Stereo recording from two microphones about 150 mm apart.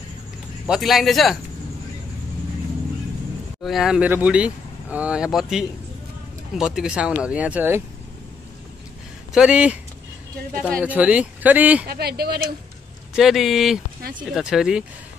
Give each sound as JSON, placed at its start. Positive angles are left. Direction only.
{"t": 0.7, "sound": "speech", "side_deg": 0}
{"t": 3.6, "sound": "speech", "side_deg": 0}
{"t": 9.3, "sound": "speech", "side_deg": -5}
{"t": 10.8, "sound": "speech", "side_deg": -10}
{"t": 11.9, "sound": "speech", "side_deg": -90}
{"t": 13.1, "sound": "speech", "side_deg": 0}